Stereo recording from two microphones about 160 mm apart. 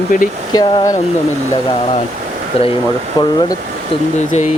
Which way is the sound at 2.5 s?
40° left (ahead or behind).